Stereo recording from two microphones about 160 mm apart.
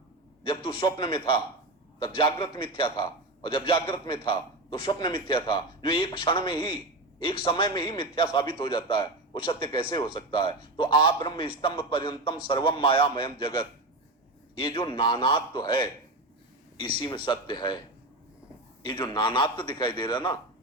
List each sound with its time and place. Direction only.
0.4 s a man's voice: 30° left (ahead or behind)
18.8 s a man's voice: 30° left (ahead or behind)